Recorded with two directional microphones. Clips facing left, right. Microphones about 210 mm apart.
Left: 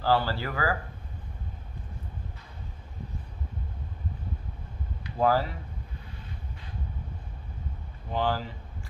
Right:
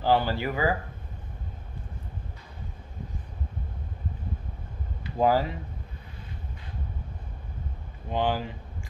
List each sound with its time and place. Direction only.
0.0 s speech: 20° right (ahead or behind)
5.1 s speech: 15° right (ahead or behind)
8.1 s speech: 15° right (ahead or behind)